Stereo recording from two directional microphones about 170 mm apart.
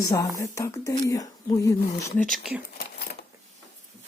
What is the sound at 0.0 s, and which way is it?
Speech, 20° left (ahead or behind).